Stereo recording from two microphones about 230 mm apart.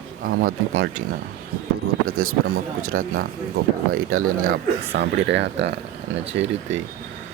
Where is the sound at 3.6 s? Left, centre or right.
Right.